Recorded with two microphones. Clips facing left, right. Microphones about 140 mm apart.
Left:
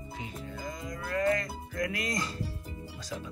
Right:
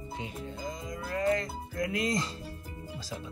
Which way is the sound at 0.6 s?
20° right (ahead or behind).